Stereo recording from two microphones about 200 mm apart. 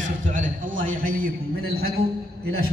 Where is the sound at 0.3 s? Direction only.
40° right (ahead or behind).